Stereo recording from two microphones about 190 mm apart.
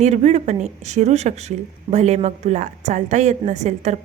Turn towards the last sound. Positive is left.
turn(degrees=-35)  # may be behind; listen again after turning